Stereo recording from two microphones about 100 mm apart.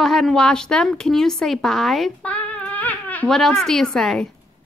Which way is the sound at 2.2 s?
15° left (ahead or behind).